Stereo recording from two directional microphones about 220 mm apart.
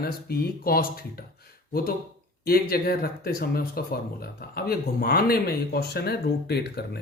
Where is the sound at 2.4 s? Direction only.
45° left (ahead or behind).